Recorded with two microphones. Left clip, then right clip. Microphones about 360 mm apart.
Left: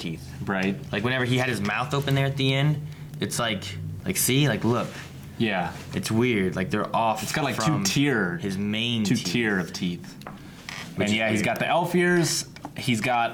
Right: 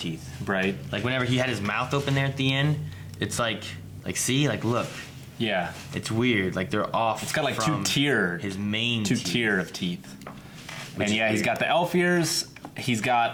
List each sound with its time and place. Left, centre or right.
0.4 s speech: centre
0.9 s speech: right
5.4 s speech: centre
5.9 s speech: right
7.3 s speech: centre
8.4 s speech: right
9.2 s speech: centre
11.1 s speech: centre